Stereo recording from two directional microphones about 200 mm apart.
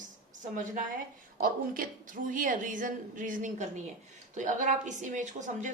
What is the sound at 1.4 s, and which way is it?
A woman's voice, 45° right (ahead or behind).